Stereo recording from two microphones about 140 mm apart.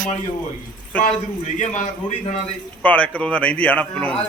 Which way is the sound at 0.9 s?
10° left (ahead or behind).